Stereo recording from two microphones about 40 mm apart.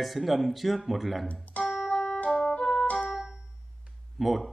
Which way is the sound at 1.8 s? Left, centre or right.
Left.